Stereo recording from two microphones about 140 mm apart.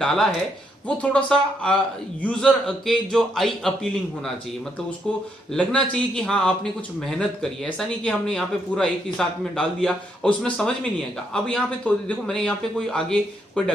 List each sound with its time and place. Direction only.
0.0 s a man's voice: 5° left (ahead or behind)
5.5 s a man's voice: 5° left (ahead or behind)